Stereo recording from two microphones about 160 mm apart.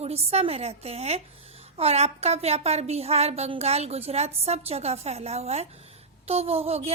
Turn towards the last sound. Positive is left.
turn(degrees=-40)  # may be behind; listen again after turning